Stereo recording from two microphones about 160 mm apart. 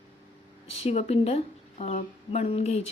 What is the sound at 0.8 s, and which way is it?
A woman's voice, 40° left (ahead or behind).